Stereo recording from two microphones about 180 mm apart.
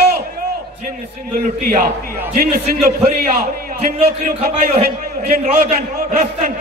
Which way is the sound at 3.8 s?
50° right (ahead or behind).